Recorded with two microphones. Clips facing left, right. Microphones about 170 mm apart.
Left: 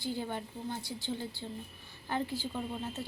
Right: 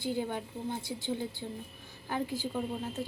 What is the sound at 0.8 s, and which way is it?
Speech, 50° right (ahead or behind).